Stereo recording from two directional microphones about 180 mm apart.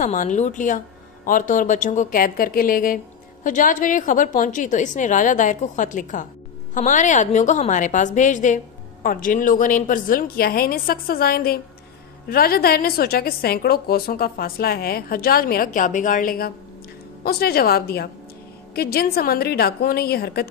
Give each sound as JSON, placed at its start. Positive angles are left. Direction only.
{"t": 0.0, "sound": "a woman's voice", "side_deg": 45}